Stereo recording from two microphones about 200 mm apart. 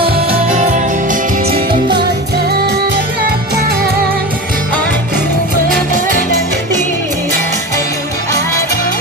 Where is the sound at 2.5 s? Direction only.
55° right (ahead or behind).